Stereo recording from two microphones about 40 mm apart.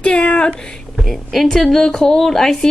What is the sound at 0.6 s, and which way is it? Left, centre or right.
A woman's voice, centre.